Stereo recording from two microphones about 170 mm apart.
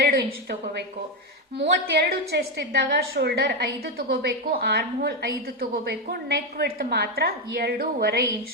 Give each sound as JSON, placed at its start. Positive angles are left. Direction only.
{"t": 1.5, "sound": "a woman's voice", "side_deg": -80}